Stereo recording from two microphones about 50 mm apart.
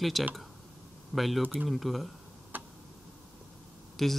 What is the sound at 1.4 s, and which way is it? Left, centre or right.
Speech, right.